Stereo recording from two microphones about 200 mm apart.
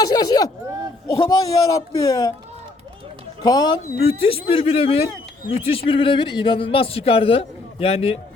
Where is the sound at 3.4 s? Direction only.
20° left (ahead or behind).